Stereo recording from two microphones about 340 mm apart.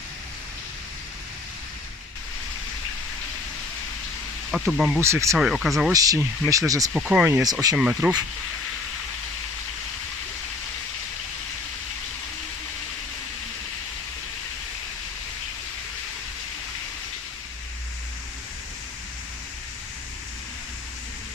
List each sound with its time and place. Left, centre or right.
4.5 s speech: centre